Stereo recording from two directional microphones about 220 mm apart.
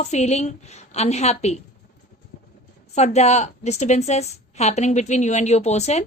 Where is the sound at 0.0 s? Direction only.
30° left (ahead or behind).